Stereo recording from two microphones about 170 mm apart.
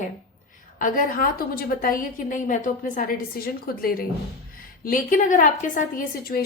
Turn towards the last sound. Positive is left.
turn(degrees=60)  # may be behind; listen again after turning